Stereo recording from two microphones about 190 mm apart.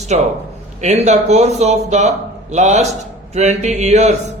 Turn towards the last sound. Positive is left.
turn(degrees=-35)  # may be behind; listen again after turning